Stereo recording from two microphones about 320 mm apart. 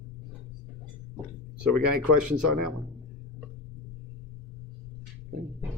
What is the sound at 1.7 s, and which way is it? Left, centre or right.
Speech, right.